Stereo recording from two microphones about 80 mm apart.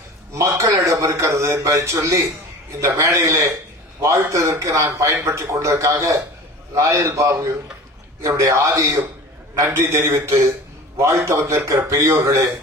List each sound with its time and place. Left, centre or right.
0.3 s a man's voice: right
11.7 s a man's voice: right